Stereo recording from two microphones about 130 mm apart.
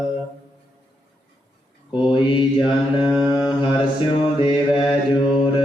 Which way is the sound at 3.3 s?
35° left (ahead or behind).